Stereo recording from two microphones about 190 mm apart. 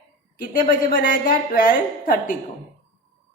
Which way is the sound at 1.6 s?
45° left (ahead or behind).